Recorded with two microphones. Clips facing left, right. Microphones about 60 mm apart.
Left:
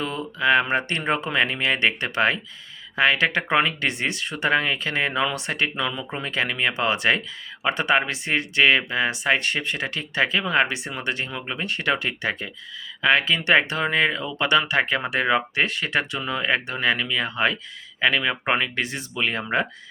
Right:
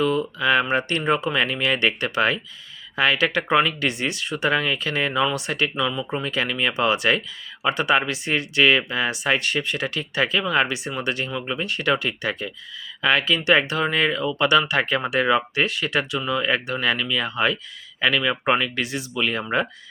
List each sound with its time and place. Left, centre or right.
0.0 s speech: left